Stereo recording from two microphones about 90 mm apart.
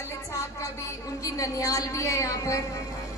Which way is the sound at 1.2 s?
40° left (ahead or behind).